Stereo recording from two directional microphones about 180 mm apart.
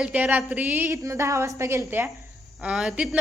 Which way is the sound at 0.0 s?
10° right (ahead or behind).